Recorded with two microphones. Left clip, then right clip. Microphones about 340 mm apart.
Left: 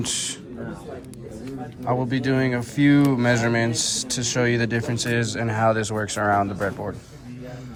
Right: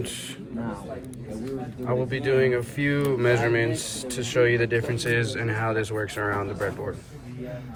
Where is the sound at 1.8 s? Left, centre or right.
Centre.